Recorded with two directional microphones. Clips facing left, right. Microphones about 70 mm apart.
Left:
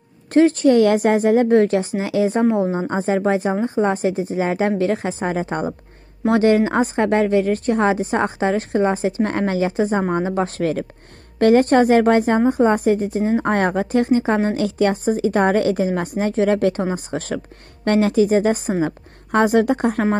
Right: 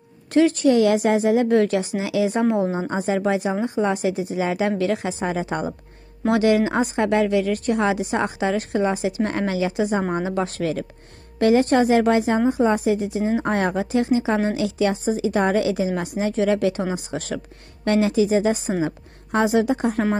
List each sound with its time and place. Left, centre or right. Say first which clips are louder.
0.3 s a woman's voice: left 3 dB; left